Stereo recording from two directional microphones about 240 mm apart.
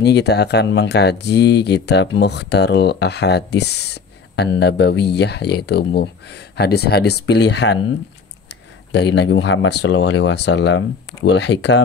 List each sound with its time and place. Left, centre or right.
0.0 s speech: left